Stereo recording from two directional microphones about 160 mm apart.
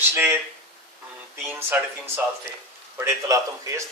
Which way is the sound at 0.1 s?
15° right (ahead or behind).